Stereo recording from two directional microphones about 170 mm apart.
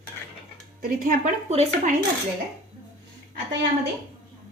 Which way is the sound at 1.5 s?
40° right (ahead or behind).